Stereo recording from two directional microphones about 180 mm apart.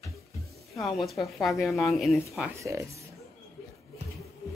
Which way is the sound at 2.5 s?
15° right (ahead or behind).